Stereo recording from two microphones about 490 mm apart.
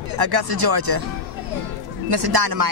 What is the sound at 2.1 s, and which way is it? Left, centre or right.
Speech, right.